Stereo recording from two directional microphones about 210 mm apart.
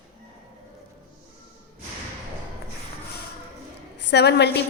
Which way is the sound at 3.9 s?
55° left (ahead or behind).